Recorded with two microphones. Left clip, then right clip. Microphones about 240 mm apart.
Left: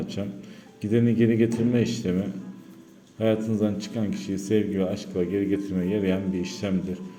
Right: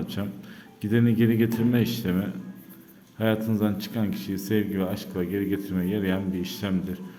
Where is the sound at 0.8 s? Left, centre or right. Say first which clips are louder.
Left 1 dB; centre.